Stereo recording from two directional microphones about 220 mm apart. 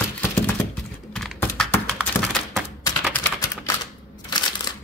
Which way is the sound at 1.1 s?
5° left (ahead or behind).